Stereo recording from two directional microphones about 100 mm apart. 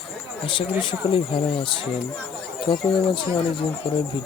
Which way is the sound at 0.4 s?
55° left (ahead or behind).